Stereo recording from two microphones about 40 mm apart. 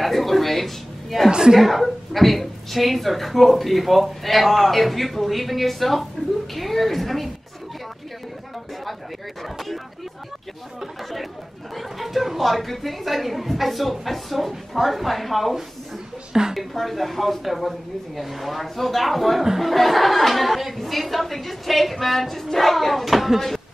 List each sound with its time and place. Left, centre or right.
0.0 s speech: centre
1.3 s speech: centre
1.6 s a woman's voice: centre
9.4 s a woman's voice: centre
11.7 s a woman's voice: centre